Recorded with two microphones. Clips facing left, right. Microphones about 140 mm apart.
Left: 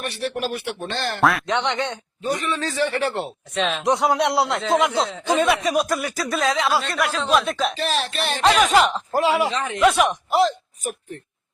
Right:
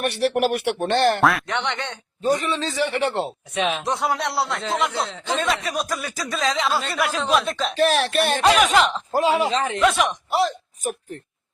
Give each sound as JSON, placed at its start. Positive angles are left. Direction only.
{"t": 0.0, "sound": "speech", "side_deg": -70}
{"t": 1.2, "sound": "speech", "side_deg": 0}
{"t": 1.5, "sound": "speech", "side_deg": 15}
{"t": 2.4, "sound": "speech", "side_deg": -25}
{"t": 3.5, "sound": "speech", "side_deg": -10}
{"t": 3.8, "sound": "speech", "side_deg": 15}
{"t": 7.8, "sound": "speech", "side_deg": -60}
{"t": 8.4, "sound": "speech", "side_deg": -10}
{"t": 9.1, "sound": "speech", "side_deg": -25}
{"t": 9.8, "sound": "speech", "side_deg": 10}